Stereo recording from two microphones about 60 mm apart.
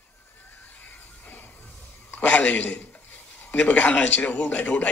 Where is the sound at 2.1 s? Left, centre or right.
Left.